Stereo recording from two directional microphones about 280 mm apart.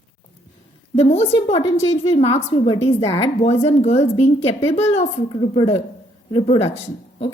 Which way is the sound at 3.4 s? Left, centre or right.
Left.